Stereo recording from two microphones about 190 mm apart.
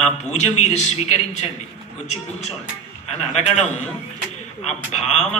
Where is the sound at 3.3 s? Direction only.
35° left (ahead or behind).